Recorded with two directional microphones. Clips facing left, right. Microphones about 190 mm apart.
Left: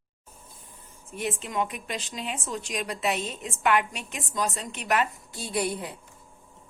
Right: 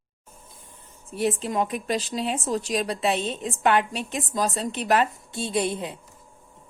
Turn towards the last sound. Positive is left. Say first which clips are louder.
# right 3 dB
turn(degrees=-20)  # may be behind; listen again after turning